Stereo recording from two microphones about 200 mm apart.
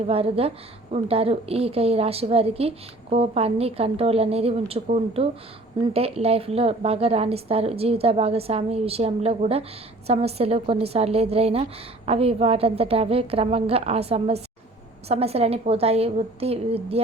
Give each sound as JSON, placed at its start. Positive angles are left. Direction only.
{"t": 0.1, "sound": "a woman's voice", "side_deg": -30}